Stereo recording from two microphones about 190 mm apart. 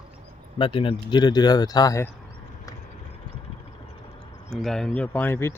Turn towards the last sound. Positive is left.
turn(degrees=10)  # may be behind; listen again after turning